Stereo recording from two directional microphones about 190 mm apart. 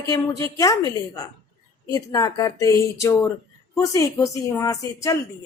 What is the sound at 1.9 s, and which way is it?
Speech, 20° left (ahead or behind).